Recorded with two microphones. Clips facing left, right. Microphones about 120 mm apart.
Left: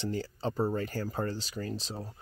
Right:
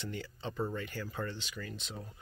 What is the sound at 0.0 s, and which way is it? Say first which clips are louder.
Speech: left 7 dB; 35° left (ahead or behind).